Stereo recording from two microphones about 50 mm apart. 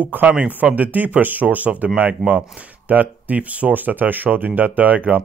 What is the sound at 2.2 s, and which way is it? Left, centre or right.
Speech, centre.